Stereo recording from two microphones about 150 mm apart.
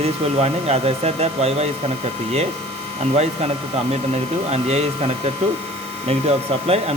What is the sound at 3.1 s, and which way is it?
Speech, 45° right (ahead or behind).